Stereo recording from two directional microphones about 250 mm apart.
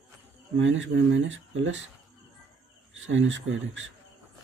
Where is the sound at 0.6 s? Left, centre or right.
Right.